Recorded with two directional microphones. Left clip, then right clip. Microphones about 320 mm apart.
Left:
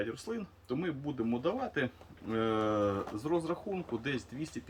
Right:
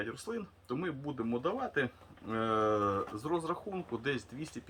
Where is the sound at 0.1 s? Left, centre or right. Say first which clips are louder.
Even; centre.